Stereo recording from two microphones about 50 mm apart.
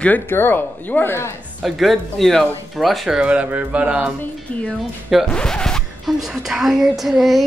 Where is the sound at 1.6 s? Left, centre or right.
Centre.